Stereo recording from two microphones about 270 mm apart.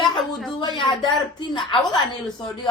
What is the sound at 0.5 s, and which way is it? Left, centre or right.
Speech, centre.